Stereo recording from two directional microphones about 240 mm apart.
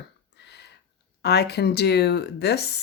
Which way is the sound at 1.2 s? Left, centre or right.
Left.